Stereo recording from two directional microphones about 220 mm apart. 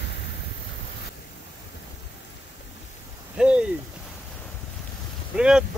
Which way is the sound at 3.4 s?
5° right (ahead or behind).